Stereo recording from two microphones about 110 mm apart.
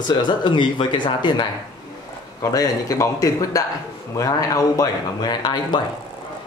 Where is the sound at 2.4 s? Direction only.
30° left (ahead or behind).